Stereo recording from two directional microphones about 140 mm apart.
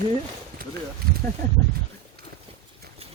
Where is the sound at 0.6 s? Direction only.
90° right.